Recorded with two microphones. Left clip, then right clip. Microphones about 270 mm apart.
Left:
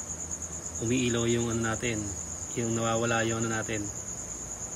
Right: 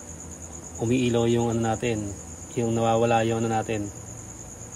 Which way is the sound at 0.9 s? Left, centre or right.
Centre.